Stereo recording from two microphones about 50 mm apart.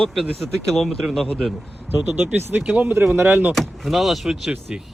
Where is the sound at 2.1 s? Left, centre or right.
Right.